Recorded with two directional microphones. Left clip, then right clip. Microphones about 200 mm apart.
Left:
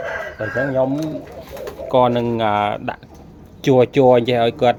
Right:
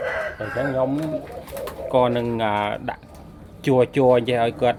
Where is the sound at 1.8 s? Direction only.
30° left (ahead or behind).